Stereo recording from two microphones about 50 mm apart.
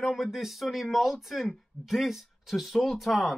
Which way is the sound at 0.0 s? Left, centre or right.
Centre.